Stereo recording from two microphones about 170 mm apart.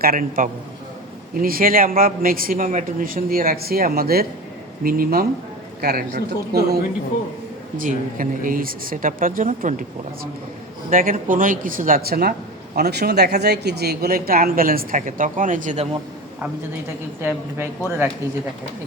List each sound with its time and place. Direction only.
0.0 s speech: 60° right (ahead or behind)
7.8 s speech: 50° right (ahead or behind)
10.8 s speech: 50° right (ahead or behind)
17.2 s a woman's voice: 15° right (ahead or behind)